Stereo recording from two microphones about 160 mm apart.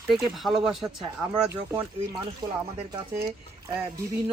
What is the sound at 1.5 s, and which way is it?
Speech, 20° right (ahead or behind).